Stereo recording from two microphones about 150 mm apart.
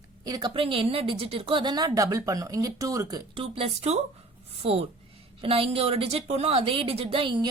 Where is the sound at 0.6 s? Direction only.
40° right (ahead or behind).